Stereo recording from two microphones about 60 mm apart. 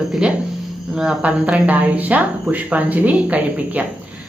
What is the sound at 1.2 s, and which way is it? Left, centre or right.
A woman's voice, right.